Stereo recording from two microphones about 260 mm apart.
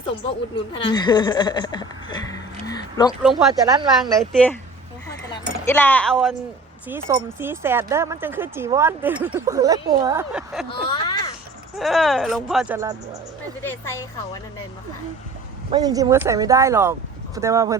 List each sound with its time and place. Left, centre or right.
0.3 s speech: centre
3.5 s speech: centre
4.2 s speech: centre
5.0 s a sound: centre
6.8 s speech: centre
10.7 s speech: centre
11.8 s speech: centre
13.6 s speech: centre
15.7 s speech: centre